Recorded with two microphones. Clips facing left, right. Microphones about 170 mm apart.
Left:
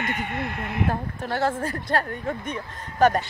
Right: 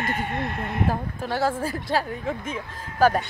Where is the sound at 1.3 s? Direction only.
10° right (ahead or behind).